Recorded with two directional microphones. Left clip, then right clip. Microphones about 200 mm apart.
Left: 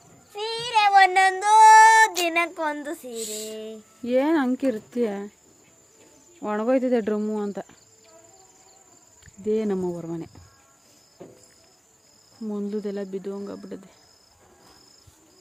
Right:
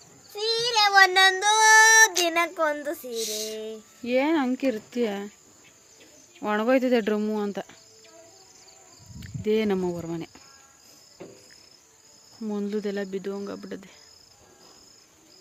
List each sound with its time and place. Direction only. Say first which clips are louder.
0.3 s child singing: even; 40° left (ahead or behind)
2.2 s a sound: even; 50° left (ahead or behind)
3.1 s a sound: right 3 dB; 20° left (ahead or behind)
4.0 s speech: left 2 dB; 15° left (ahead or behind)
6.4 s speech: even; centre (ahead or behind)
9.4 s speech: right 1 dB; centre (ahead or behind)
12.5 s speech: even; centre (ahead or behind)